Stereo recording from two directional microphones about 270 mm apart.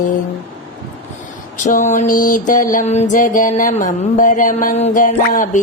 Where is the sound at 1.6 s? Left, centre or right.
Left.